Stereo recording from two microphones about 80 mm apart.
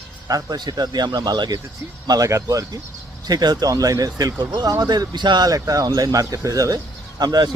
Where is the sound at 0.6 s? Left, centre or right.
Right.